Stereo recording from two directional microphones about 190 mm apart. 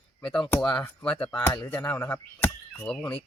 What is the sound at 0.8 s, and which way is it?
Speech, 5° left (ahead or behind).